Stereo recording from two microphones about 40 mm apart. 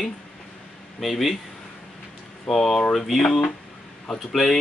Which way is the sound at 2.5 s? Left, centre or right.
Centre.